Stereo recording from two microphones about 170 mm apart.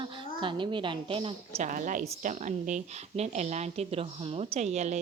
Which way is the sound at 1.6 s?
50° right (ahead or behind).